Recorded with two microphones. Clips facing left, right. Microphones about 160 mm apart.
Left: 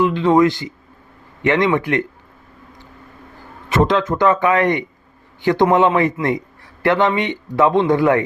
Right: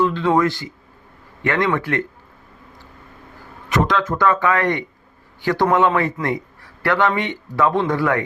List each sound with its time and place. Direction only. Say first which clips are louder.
0.0 s speech: left 3 dB; 15° left (ahead or behind)
3.7 s a man's voice: left 3 dB; 25° left (ahead or behind)